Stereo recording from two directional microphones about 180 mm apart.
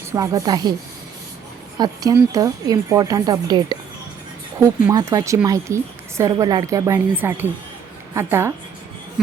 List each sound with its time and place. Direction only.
0.1 s a woman's voice: 20° right (ahead or behind)
1.8 s a woman's voice: 20° right (ahead or behind)
4.9 s speech: 20° right (ahead or behind)